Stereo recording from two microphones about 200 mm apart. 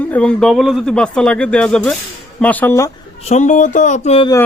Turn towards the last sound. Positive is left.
turn(degrees=30)  # may be behind; listen again after turning